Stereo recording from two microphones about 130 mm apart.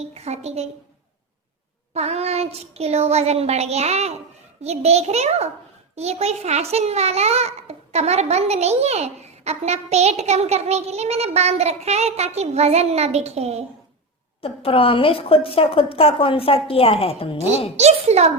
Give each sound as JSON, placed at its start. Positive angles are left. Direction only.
{"t": 0.1, "sound": "a woman's voice", "side_deg": -55}
{"t": 1.9, "sound": "a child's voice", "side_deg": -55}
{"t": 14.4, "sound": "a woman's voice", "side_deg": 45}
{"t": 17.7, "sound": "a child's voice", "side_deg": -55}